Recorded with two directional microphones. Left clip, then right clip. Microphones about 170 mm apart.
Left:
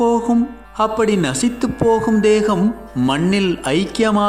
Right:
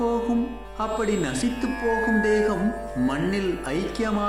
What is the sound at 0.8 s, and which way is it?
A man's voice, 55° left (ahead or behind).